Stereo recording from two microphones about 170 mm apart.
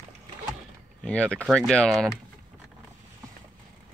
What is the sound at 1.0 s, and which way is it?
Speech, 5° left (ahead or behind).